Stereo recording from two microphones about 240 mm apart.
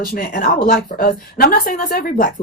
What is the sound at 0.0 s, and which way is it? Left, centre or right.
Speech, left.